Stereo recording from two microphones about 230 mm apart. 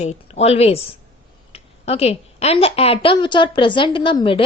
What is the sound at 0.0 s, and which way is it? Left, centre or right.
A woman's voice, left.